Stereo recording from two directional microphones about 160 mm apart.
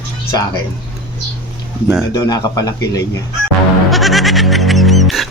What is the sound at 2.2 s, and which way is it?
Speech, 25° left (ahead or behind).